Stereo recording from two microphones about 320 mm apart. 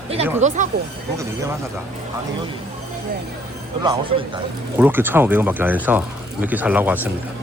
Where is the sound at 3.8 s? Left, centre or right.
Centre.